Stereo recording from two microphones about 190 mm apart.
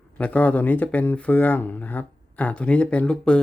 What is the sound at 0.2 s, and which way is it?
Speech, 10° left (ahead or behind).